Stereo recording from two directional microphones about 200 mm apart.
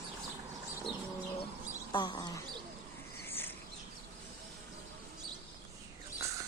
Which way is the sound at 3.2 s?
10° left (ahead or behind).